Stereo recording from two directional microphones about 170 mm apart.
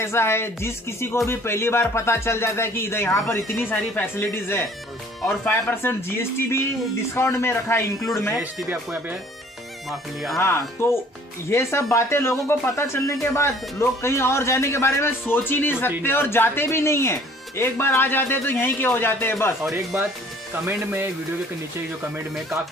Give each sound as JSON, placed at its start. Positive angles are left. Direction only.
{"t": 0.0, "sound": "speech", "side_deg": 15}
{"t": 8.6, "sound": "speech", "side_deg": 0}
{"t": 10.3, "sound": "speech", "side_deg": 15}
{"t": 19.9, "sound": "speech", "side_deg": -10}